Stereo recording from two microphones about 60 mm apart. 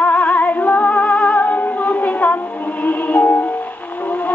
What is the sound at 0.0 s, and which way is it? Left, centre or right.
Music, left.